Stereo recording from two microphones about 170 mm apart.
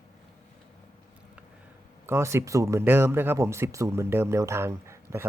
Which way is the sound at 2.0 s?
15° right (ahead or behind).